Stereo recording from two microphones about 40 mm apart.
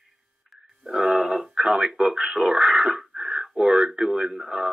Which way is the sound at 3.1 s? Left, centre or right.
Right.